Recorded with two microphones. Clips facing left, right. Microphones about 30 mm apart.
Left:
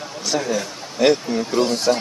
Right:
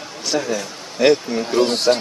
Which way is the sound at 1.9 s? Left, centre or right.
Right.